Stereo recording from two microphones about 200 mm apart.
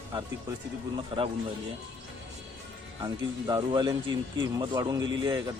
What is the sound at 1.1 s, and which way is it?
Speech, 25° right (ahead or behind).